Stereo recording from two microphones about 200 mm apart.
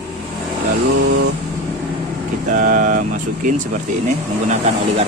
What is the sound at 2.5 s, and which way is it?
Speech, 40° right (ahead or behind).